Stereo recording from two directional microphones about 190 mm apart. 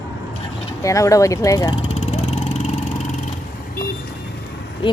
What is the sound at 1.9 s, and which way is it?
Vehicle, 35° left (ahead or behind).